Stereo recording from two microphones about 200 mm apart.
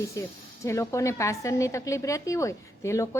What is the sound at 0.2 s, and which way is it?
Speech, 15° left (ahead or behind).